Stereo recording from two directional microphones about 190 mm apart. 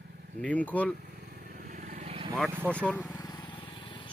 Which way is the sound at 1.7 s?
45° right (ahead or behind).